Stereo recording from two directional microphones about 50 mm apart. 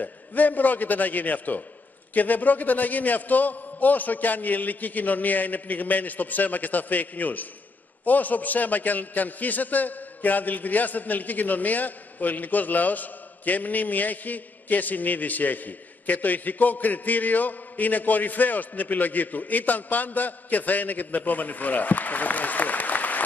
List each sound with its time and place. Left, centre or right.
0.0 s a man's voice: left